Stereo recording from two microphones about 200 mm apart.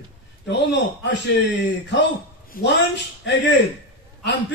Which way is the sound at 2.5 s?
60° left (ahead or behind).